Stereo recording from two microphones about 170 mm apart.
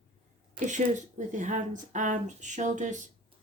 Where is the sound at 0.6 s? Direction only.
45° right (ahead or behind).